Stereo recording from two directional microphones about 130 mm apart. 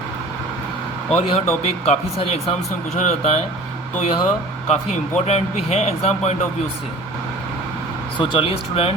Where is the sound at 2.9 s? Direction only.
65° left (ahead or behind).